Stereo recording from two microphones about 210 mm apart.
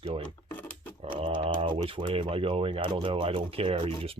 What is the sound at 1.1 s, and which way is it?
Speech, 25° right (ahead or behind).